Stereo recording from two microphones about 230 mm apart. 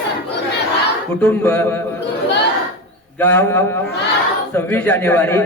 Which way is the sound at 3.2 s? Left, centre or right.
Centre.